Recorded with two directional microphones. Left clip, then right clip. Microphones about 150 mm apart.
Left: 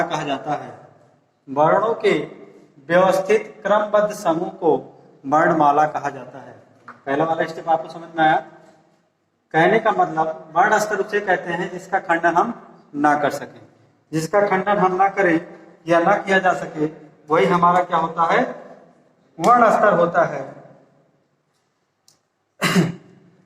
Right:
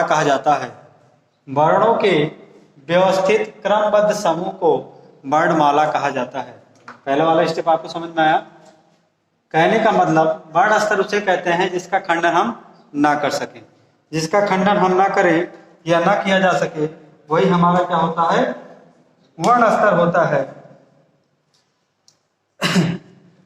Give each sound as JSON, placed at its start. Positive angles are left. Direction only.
{"t": 0.0, "sound": "a man's voice", "side_deg": -60}
{"t": 1.5, "sound": "a man's voice", "side_deg": -35}
{"t": 7.7, "sound": "a man's voice", "side_deg": -20}
{"t": 9.6, "sound": "a man's voice", "side_deg": -25}
{"t": 9.9, "sound": "a man's voice", "side_deg": -40}
{"t": 10.2, "sound": "a man's voice", "side_deg": -30}
{"t": 14.9, "sound": "a man's voice", "side_deg": -45}
{"t": 15.9, "sound": "a man's voice", "side_deg": -35}
{"t": 17.6, "sound": "a man's voice", "side_deg": -30}
{"t": 22.5, "sound": "throat clearing", "side_deg": -25}